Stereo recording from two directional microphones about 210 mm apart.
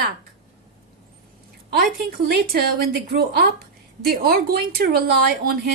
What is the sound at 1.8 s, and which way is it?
A woman's voice, 45° right (ahead or behind).